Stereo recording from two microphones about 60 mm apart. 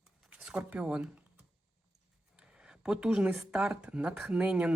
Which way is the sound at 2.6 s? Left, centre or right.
Centre.